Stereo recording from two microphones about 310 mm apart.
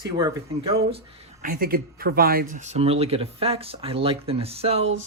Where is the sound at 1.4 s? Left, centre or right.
Right.